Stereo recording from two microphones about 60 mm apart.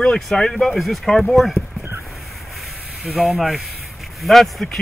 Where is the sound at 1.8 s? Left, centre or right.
Right.